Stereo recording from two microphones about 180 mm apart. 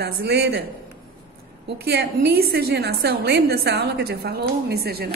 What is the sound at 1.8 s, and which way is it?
A woman's voice, 65° right (ahead or behind).